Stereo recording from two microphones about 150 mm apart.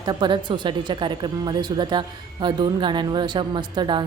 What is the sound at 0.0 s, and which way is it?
A woman's voice, 30° right (ahead or behind).